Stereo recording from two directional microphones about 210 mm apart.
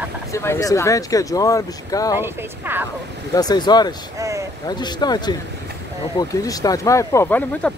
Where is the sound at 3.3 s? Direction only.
20° left (ahead or behind).